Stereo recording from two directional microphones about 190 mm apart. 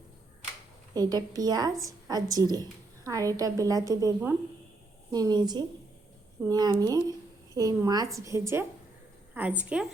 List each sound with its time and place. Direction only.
0.9 s a woman's voice: 20° right (ahead or behind)